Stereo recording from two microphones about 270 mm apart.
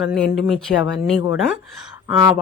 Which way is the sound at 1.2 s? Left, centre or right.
Centre.